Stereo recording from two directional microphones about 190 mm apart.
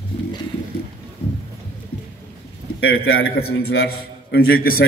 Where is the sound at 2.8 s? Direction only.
90° left.